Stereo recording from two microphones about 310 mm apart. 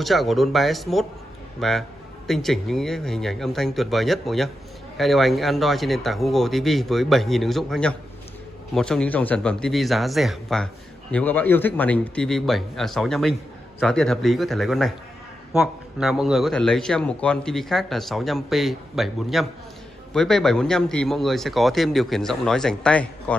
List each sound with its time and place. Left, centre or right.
0.0 s speech: centre